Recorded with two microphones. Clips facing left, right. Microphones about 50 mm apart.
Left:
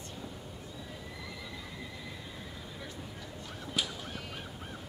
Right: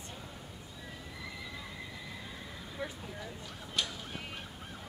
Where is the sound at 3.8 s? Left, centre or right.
Centre.